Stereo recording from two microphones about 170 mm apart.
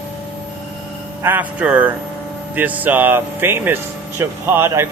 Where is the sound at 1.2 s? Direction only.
10° right (ahead or behind).